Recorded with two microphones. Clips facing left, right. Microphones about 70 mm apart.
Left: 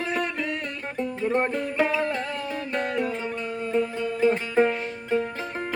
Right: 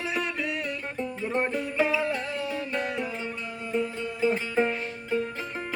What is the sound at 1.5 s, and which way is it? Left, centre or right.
Music, left.